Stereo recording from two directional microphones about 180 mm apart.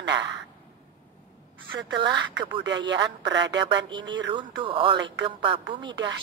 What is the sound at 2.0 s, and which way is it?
Speech, 25° right (ahead or behind).